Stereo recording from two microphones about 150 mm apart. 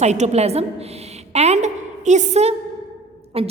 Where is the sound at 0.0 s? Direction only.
50° right (ahead or behind).